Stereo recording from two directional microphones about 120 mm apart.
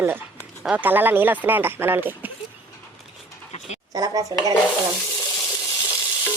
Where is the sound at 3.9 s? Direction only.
35° right (ahead or behind).